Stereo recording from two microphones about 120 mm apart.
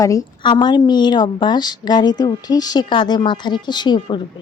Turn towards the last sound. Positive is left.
turn(degrees=40)  # may be behind; listen again after turning